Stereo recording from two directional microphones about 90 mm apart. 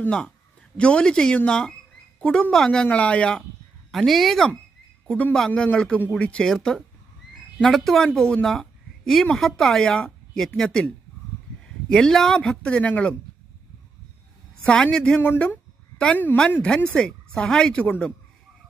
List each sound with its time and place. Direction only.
0.7 s speech: 10° left (ahead or behind)
3.9 s speech: centre (ahead or behind)
14.7 s speech: 10° left (ahead or behind)